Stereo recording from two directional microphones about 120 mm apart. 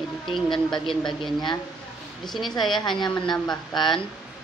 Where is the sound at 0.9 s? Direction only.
Centre (ahead or behind).